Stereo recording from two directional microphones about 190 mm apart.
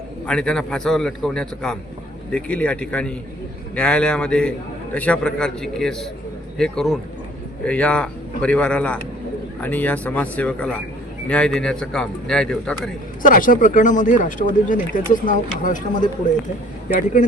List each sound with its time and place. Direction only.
0.3 s a man's voice: 5° left (ahead or behind)
13.2 s speech: 45° left (ahead or behind)